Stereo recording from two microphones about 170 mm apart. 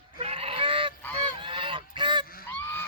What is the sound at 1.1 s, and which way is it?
Goose, 30° right (ahead or behind).